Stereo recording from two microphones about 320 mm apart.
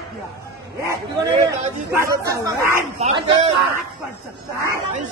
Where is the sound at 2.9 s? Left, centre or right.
Right.